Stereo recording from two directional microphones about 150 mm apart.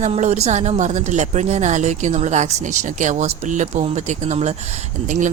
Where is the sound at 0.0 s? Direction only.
50° right (ahead or behind).